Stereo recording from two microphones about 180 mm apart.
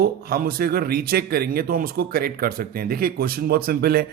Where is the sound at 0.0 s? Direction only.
55° right (ahead or behind).